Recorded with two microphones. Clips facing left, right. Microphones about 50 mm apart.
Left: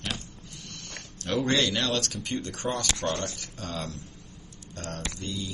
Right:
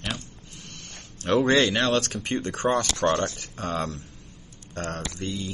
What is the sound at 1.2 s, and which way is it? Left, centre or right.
Speech, right.